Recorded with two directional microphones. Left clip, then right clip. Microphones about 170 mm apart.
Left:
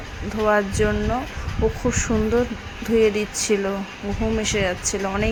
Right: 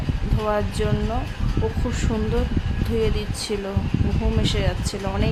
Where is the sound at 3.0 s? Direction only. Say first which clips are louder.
Left 6 dB; 20° left (ahead or behind).